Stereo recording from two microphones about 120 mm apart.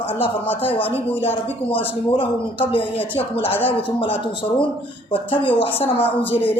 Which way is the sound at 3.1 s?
50° left (ahead or behind).